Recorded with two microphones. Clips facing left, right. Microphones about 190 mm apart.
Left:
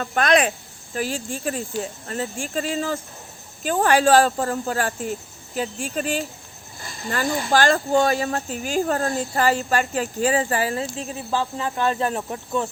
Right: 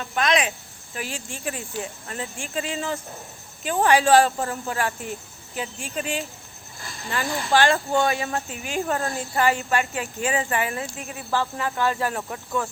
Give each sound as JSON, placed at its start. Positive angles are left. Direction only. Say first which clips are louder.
{"t": 0.0, "sound": "speech", "louder": "left 4 dB", "side_deg": 50}
{"t": 0.9, "sound": "speech", "louder": "left 7 dB", "side_deg": 35}
{"t": 4.0, "sound": "speech", "louder": "left 1 dB", "side_deg": 35}
{"t": 11.3, "sound": "speech", "louder": "even", "side_deg": 20}